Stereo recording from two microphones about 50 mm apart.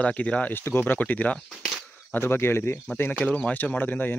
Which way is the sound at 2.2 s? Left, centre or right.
Left.